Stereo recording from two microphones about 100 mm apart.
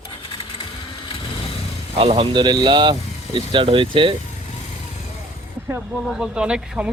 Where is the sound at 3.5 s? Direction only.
60° right (ahead or behind).